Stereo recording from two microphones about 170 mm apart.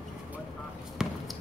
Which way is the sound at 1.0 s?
5° right (ahead or behind).